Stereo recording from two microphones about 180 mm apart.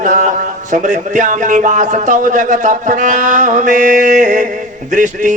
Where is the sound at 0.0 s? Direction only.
45° right (ahead or behind).